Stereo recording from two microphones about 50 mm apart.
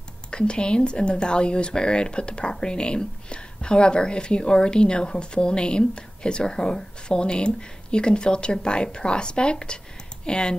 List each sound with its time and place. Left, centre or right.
0.3 s speech: centre